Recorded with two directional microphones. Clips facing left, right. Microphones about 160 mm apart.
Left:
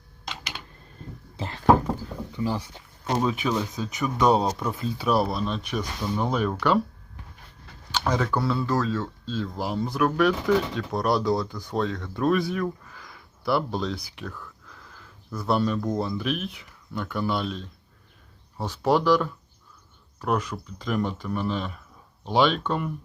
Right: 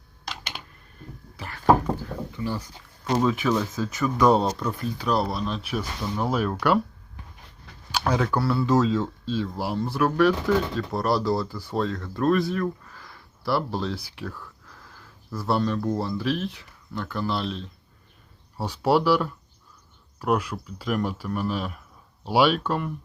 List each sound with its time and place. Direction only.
1.4 s a sound: 25° left (ahead or behind)
2.3 s speech: 15° left (ahead or behind)
5.0 s speech: 5° left (ahead or behind)
7.9 s speech: 10° right (ahead or behind)
8.6 s speech: 20° right (ahead or behind); by 17.7 s centre (ahead or behind)
18.5 s speech: 10° right (ahead or behind)